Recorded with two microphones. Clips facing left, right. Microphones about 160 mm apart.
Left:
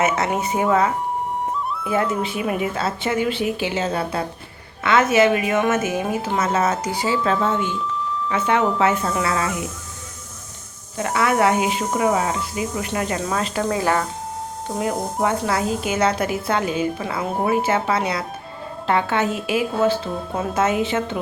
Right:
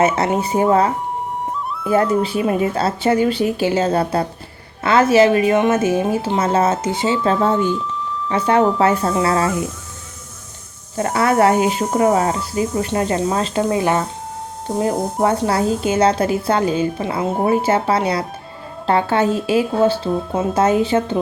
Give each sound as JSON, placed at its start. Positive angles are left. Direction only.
{"t": 0.0, "sound": "a woman's voice", "side_deg": -30}
{"t": 2.2, "sound": "a woman's voice", "side_deg": -35}
{"t": 10.9, "sound": "a woman's voice", "side_deg": -35}
{"t": 14.8, "sound": "a woman's voice", "side_deg": -35}